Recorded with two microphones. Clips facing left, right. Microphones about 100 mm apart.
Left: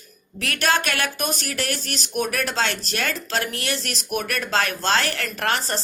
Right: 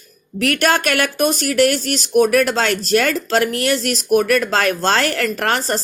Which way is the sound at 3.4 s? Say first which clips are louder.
Right 10 dB; 30° left (ahead or behind).